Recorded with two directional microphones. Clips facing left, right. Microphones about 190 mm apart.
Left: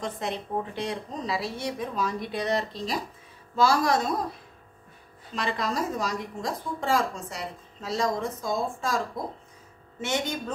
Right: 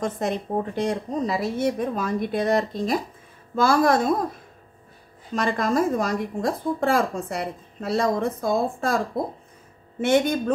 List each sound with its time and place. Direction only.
0.0 s a woman's voice: 45° right (ahead or behind)